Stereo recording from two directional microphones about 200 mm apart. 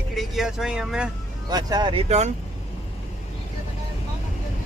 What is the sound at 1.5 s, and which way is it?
Speech, 20° right (ahead or behind).